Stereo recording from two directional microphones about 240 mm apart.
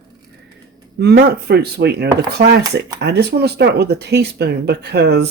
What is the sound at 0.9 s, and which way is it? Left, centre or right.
Speech, right.